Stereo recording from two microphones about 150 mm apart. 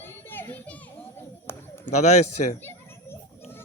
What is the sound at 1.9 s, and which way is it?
Speech, 50° left (ahead or behind).